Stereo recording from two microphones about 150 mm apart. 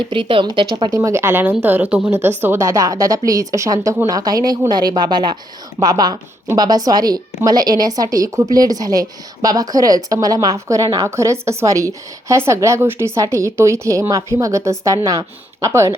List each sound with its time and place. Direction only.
0.1 s a woman's voice: 35° right (ahead or behind)